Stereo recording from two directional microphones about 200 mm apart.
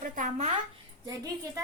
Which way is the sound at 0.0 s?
35° right (ahead or behind).